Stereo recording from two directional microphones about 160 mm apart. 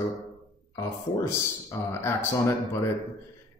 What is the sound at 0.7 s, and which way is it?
A man's voice, 20° left (ahead or behind).